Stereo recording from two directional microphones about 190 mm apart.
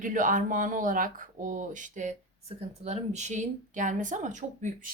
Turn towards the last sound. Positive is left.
turn(degrees=-40)  # may be behind; listen again after turning